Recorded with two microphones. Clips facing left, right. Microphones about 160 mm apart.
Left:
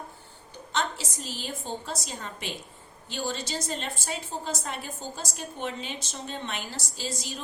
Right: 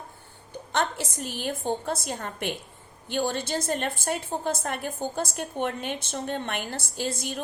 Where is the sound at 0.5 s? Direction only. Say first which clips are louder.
Right 3 dB; 55° right (ahead or behind).